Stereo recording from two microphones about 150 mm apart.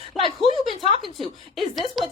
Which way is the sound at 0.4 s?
35° left (ahead or behind).